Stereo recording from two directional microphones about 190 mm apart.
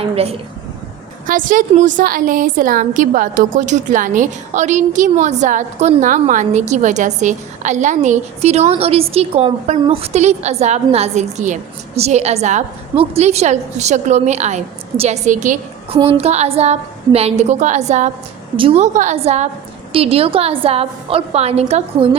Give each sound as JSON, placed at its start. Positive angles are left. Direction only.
{"t": 0.2, "sound": "a woman's voice", "side_deg": -30}
{"t": 1.3, "sound": "a woman's voice", "side_deg": -45}